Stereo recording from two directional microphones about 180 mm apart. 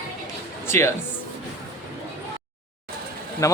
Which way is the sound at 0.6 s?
15° left (ahead or behind).